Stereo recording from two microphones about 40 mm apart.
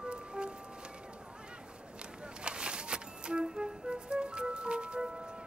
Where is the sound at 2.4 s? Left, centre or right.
Right.